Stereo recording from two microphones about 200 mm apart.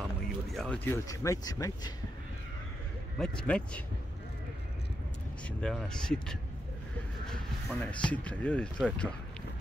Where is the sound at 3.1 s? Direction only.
5° left (ahead or behind).